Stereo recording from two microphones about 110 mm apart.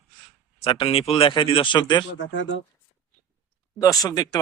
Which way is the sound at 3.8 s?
35° left (ahead or behind).